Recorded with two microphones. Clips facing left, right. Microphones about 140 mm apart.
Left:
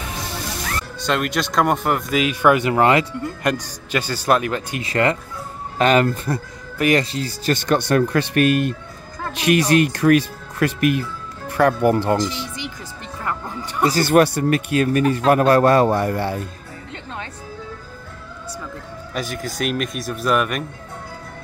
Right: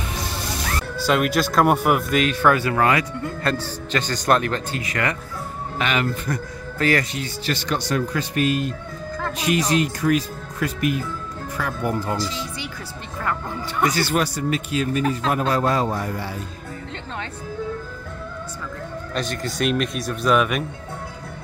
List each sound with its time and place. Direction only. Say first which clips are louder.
0.9 s speech: right 2 dB; 5° right (ahead or behind); by 3.2 s 25° left (ahead or behind)
3.4 s speech: left 2 dB; 15° left (ahead or behind)
4.8 s speech: left 8 dB; 30° left (ahead or behind)
5.8 s speech: left 7 dB; 40° left (ahead or behind)
6.8 s speech: left 3 dB; 20° left (ahead or behind)
7.1 s speech: left 5 dB; 35° left (ahead or behind)
7.5 s speech: left 7 dB; 55° left (ahead or behind); by 12.2 s 70° left (ahead or behind)
14.0 s speech: left 7 dB; 60° left (ahead or behind)
19.1 s speech: even; 5° left (ahead or behind)